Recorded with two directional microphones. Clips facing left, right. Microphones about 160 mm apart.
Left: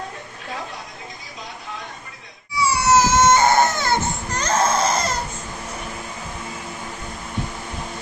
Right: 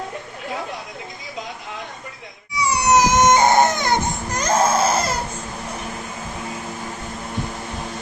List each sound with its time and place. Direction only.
2.6 s baby cry: 20° right (ahead or behind)